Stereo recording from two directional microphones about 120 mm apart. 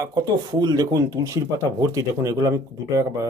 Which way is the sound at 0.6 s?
30° right (ahead or behind).